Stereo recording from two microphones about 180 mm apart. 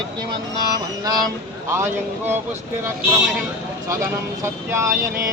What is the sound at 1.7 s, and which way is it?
Speech, 15° right (ahead or behind).